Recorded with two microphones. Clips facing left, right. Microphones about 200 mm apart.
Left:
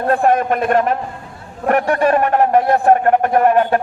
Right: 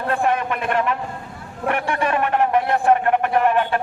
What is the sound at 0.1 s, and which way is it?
A man's voice, 40° left (ahead or behind).